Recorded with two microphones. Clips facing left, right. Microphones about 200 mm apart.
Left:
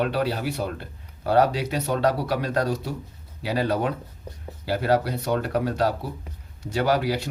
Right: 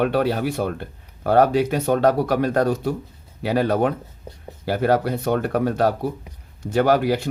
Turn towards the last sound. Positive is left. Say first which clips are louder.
# right 5 dB
turn(degrees=-50)  # may be behind; listen again after turning